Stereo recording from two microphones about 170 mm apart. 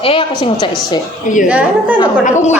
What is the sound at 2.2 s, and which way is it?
Speech, 45° left (ahead or behind).